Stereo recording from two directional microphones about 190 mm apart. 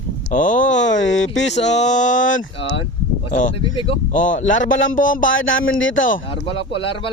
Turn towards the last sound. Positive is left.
turn(degrees=25)  # may be behind; listen again after turning